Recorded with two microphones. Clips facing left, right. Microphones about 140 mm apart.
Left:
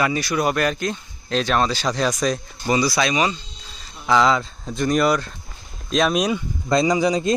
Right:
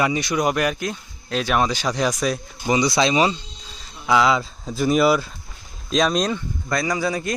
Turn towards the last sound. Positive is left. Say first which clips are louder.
# left 5 dB
turn(degrees=20)  # may be behind; listen again after turning